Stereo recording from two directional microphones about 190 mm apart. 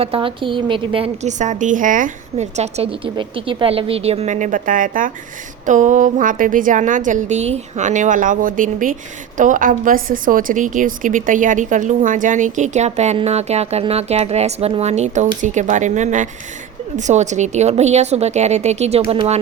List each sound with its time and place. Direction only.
0.0 s a woman's voice: 30° right (ahead or behind)